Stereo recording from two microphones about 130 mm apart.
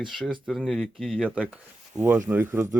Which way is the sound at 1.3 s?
10° right (ahead or behind).